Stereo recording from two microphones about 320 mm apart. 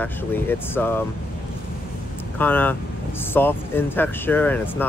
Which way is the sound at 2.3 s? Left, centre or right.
Centre.